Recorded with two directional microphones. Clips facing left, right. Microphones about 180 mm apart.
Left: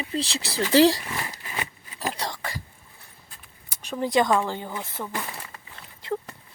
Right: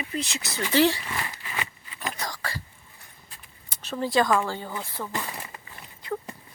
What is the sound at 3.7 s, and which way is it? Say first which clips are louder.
Speech: left 1 dB; 10° left (ahead or behind).